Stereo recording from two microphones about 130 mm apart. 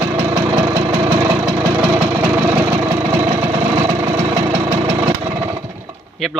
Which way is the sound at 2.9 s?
20° right (ahead or behind).